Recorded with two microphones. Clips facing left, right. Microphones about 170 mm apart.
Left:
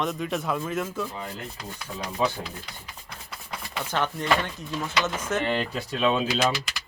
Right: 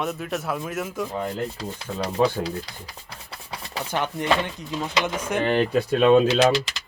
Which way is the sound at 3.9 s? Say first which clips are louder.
Right 2 dB; 15° right (ahead or behind).